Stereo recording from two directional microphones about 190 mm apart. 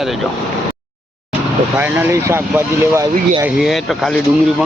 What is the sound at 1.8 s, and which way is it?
Speech, 10° right (ahead or behind).